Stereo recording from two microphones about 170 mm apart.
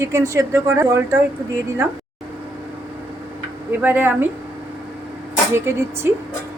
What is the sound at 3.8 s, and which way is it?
Speech, 10° right (ahead or behind).